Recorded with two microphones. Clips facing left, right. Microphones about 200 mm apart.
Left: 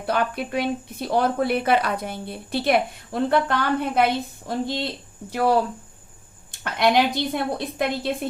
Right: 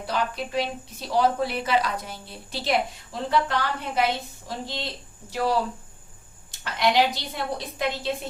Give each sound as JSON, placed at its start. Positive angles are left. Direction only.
{"t": 0.0, "sound": "speech", "side_deg": 55}